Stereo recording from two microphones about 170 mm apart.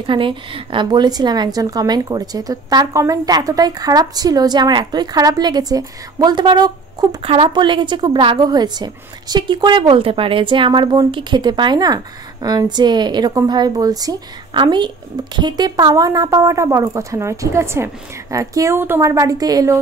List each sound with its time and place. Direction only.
0.0 s a woman's voice: 30° right (ahead or behind)